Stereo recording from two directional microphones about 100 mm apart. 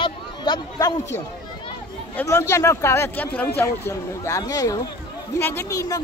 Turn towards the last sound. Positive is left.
turn(degrees=25)  # may be behind; listen again after turning